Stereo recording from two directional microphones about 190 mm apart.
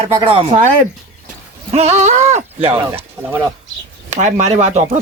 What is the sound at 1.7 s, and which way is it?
Speech, 35° right (ahead or behind).